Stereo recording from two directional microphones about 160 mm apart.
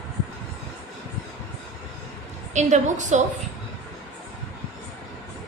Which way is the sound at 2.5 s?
50° right (ahead or behind).